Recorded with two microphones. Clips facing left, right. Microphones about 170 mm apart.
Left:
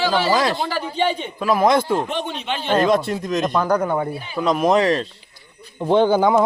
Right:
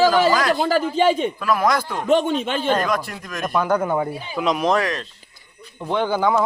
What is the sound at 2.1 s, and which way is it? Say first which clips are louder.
Speech: right 7 dB; 45° right (ahead or behind).